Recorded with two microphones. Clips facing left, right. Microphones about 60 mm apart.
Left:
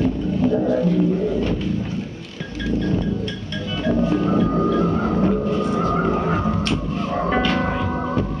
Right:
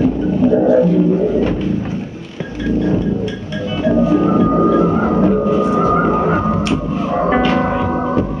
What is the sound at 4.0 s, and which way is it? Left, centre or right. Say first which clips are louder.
Music: right 6 dB; centre.